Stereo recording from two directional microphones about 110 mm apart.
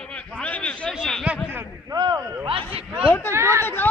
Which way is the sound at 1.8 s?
40° right (ahead or behind).